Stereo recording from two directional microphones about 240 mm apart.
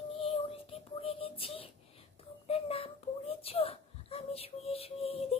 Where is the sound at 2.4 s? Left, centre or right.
Left.